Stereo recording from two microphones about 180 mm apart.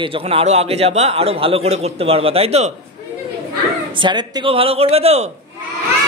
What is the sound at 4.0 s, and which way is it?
A man's voice, 25° right (ahead or behind).